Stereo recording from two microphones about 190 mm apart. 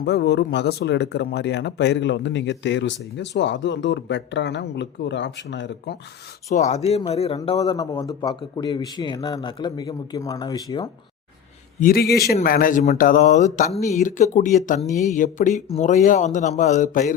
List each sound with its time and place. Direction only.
0.0 s speech: 60° left (ahead or behind)
6.5 s speech: 40° left (ahead or behind)
7.8 s a man's voice: 20° left (ahead or behind)
11.8 s speech: 50° left (ahead or behind)